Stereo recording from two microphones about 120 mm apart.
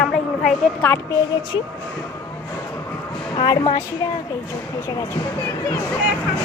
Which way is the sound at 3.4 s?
35° left (ahead or behind).